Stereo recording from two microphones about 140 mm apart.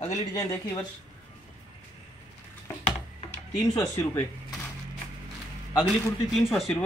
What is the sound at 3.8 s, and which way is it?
Speech, 25° left (ahead or behind).